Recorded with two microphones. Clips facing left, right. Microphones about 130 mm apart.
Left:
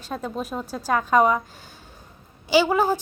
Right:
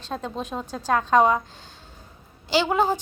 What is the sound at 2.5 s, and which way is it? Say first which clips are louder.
Speech: left 3 dB; 10° left (ahead or behind).